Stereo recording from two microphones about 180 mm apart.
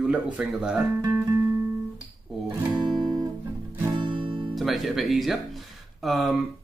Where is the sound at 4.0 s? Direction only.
25° right (ahead or behind).